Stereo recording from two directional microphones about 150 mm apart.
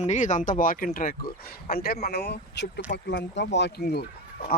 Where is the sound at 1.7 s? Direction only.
85° left.